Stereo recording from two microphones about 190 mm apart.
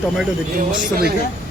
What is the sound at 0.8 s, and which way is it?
Speech, 55° right (ahead or behind).